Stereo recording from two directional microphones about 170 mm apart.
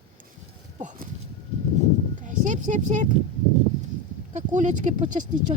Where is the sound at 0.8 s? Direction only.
50° right (ahead or behind).